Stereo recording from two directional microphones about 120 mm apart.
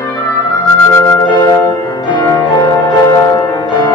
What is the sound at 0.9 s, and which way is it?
Music, 30° left (ahead or behind).